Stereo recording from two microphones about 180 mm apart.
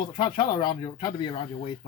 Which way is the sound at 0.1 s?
25° left (ahead or behind).